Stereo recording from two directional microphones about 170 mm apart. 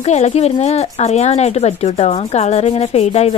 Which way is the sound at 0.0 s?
40° left (ahead or behind).